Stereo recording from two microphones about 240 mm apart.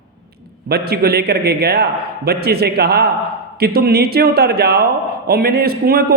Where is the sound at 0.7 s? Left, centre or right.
Right.